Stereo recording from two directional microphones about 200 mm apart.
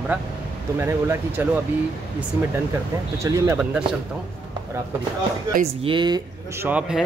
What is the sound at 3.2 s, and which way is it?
Speech, 15° right (ahead or behind).